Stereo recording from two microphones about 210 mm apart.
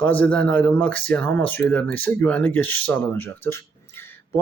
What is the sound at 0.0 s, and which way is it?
Speech, 10° left (ahead or behind).